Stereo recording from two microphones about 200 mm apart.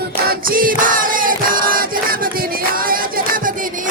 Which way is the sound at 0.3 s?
45° right (ahead or behind).